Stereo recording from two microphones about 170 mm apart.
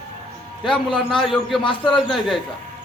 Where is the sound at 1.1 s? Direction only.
Centre (ahead or behind).